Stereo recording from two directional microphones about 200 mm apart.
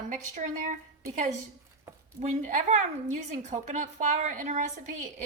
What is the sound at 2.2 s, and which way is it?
A woman's voice, 40° right (ahead or behind).